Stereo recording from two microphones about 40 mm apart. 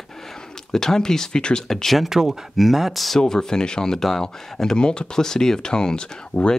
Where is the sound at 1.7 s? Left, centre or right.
Centre.